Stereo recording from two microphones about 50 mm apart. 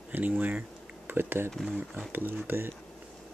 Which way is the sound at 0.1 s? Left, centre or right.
Right.